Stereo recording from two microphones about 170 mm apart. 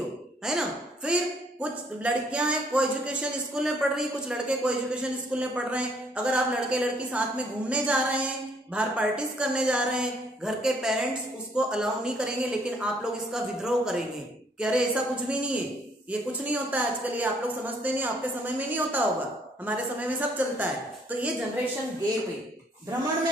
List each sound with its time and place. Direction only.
0.5 s a woman's voice: 5° right (ahead or behind)